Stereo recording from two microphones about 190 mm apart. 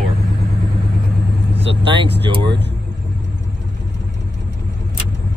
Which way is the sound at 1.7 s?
25° right (ahead or behind).